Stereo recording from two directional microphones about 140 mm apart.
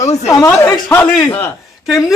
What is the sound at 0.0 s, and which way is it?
A man's voice, 25° left (ahead or behind).